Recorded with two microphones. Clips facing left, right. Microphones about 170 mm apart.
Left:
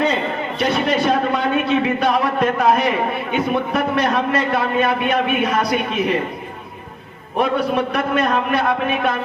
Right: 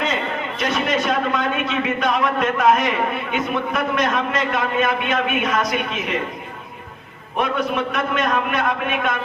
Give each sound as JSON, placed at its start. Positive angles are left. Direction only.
{"t": 0.6, "sound": "a man's voice", "side_deg": 30}
{"t": 7.3, "sound": "a man's voice", "side_deg": 35}